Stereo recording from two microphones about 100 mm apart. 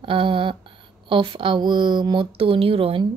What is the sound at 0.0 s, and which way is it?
A woman's voice, 60° right (ahead or behind).